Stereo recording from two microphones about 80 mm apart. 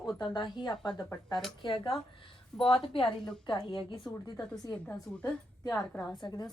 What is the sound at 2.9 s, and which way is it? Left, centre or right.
Speech, left.